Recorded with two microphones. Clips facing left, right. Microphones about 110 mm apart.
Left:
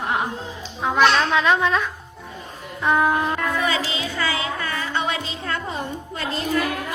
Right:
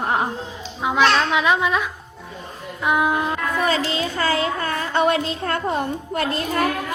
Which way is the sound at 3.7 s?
45° right (ahead or behind).